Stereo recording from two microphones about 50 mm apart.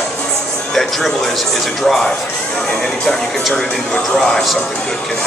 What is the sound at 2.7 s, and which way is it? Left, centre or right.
Speech, centre.